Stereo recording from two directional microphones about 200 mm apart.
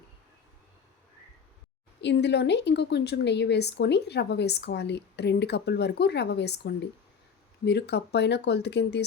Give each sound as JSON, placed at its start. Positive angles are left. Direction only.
{"t": 2.0, "sound": "speech", "side_deg": 60}